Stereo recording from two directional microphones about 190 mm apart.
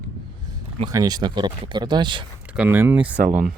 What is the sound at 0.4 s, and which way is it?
Speech, 20° right (ahead or behind).